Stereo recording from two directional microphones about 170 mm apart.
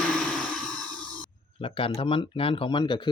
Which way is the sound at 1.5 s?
30° left (ahead or behind).